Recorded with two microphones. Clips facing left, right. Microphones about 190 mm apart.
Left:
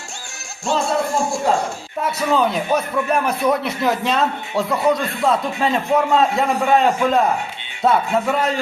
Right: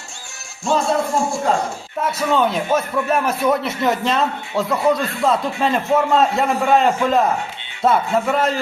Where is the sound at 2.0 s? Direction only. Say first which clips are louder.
Even; centre (ahead or behind).